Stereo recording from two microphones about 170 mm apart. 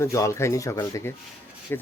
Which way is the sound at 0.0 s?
20° left (ahead or behind).